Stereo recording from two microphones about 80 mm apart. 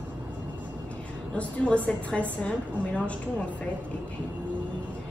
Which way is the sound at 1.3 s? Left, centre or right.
Centre.